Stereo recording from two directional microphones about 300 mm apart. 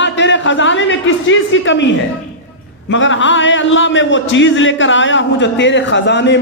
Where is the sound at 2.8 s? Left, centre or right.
Left.